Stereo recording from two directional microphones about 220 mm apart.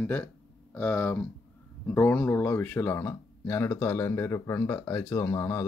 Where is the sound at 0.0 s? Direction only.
10° left (ahead or behind).